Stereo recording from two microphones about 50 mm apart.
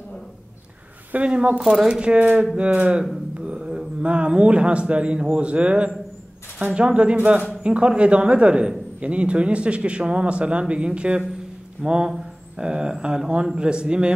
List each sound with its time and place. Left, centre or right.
1.1 s a man's voice: right
1.6 s a man's voice: centre